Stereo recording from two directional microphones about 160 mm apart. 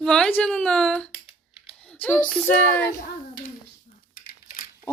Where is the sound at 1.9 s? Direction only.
10° left (ahead or behind).